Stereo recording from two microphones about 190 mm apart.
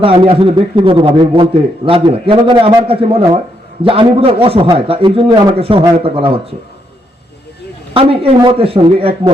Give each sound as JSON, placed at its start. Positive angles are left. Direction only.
{"t": 0.0, "sound": "a man's voice", "side_deg": -30}
{"t": 7.9, "sound": "a man's voice", "side_deg": -30}